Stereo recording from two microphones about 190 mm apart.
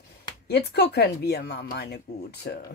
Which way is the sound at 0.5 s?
60° left (ahead or behind).